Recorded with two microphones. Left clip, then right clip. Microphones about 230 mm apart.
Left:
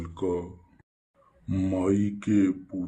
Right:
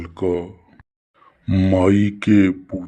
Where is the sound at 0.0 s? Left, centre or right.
Right.